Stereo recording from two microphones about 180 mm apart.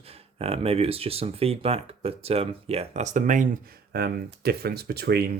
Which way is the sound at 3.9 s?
60° right (ahead or behind).